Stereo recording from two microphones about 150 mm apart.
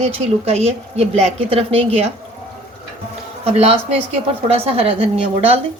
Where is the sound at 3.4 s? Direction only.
45° right (ahead or behind).